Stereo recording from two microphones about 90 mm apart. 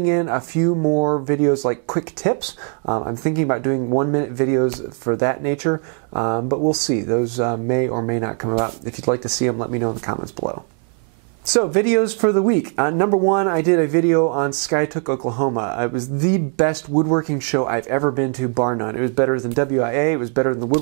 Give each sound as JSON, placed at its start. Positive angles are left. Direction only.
{"t": 0.0, "sound": "speech", "side_deg": -20}
{"t": 11.6, "sound": "speech", "side_deg": -15}